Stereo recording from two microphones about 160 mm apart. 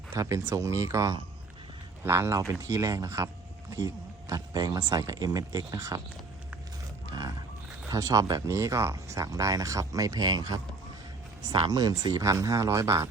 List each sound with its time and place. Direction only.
0.1 s a man's voice: 20° right (ahead or behind)
7.1 s music: 25° right (ahead or behind)
7.9 s speech: 20° right (ahead or behind)